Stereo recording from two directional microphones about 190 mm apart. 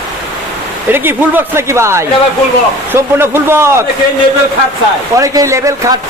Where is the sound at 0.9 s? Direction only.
10° right (ahead or behind).